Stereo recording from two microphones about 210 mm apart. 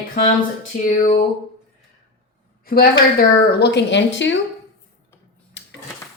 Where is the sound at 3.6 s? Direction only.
55° left (ahead or behind).